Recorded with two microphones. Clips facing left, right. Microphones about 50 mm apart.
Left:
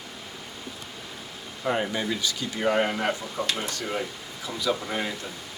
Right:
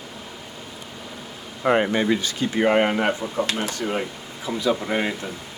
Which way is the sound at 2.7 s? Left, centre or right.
Right.